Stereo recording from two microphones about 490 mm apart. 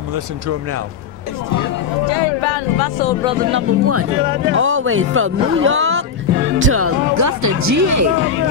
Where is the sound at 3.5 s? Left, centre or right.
Right.